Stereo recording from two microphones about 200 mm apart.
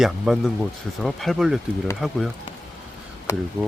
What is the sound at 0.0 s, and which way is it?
Speech, centre (ahead or behind).